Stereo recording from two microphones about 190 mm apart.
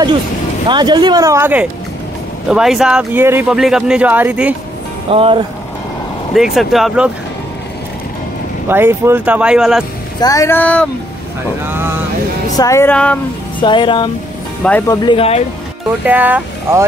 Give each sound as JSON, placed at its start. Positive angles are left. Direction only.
{"t": 0.7, "sound": "speech", "side_deg": -25}
{"t": 5.1, "sound": "speech", "side_deg": -30}
{"t": 6.3, "sound": "speech", "side_deg": 0}
{"t": 8.6, "sound": "speech", "side_deg": -10}
{"t": 10.2, "sound": "speech", "side_deg": 15}
{"t": 11.6, "sound": "speech", "side_deg": -10}
{"t": 12.5, "sound": "speech", "side_deg": 15}
{"t": 13.6, "sound": "speech", "side_deg": 25}
{"t": 14.6, "sound": "speech", "side_deg": 10}
{"t": 15.0, "sound": "speech", "side_deg": 30}
{"t": 16.1, "sound": "speech", "side_deg": -10}